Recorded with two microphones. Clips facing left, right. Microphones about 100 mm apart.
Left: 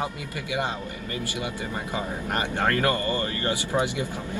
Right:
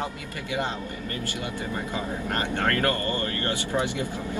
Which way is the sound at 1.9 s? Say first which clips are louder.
Left 2 dB; 15° left (ahead or behind).